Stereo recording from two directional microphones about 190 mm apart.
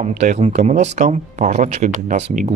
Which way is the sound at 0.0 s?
35° right (ahead or behind).